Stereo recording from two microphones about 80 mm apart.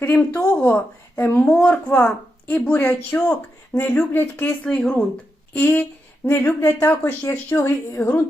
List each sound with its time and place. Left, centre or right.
0.0 s a woman's voice: centre
4.6 s a woman's voice: centre; by 8.0 s left